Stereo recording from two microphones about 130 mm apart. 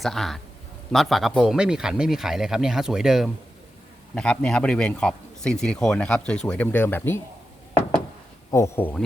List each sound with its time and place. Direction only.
0.0 s speech: centre (ahead or behind)
4.1 s a man's voice: 5° left (ahead or behind)
8.4 s speech: 20° left (ahead or behind)